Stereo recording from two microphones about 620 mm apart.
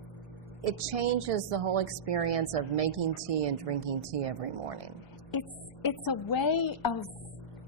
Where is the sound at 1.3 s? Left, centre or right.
Right.